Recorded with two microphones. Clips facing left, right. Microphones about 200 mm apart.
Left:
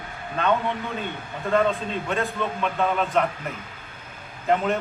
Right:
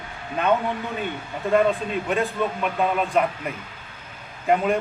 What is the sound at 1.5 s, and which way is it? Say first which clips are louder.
A man's voice: right 2 dB; 15° right (ahead or behind).